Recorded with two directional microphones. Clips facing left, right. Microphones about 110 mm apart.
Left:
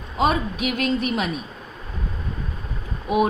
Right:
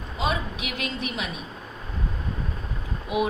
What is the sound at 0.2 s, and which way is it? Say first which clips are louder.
Speech: left 7 dB; 50° left (ahead or behind).